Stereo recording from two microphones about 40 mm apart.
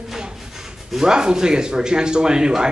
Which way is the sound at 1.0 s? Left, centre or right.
Centre.